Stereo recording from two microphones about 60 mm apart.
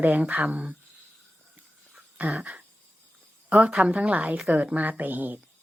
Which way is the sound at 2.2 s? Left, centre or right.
Right.